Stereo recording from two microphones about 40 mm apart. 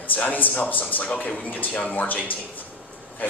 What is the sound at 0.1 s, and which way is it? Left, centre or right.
Speech, left.